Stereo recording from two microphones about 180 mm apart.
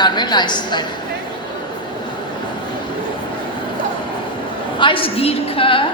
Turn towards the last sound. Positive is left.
turn(degrees=30)  # may be behind; listen again after turning